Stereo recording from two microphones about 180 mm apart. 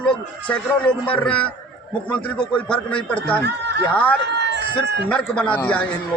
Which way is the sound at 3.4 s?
70° right (ahead or behind).